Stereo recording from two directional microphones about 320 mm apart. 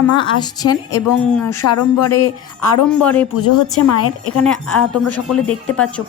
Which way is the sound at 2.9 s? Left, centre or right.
Centre.